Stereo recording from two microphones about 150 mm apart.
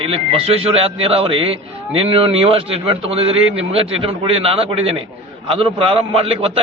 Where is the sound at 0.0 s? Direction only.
40° right (ahead or behind).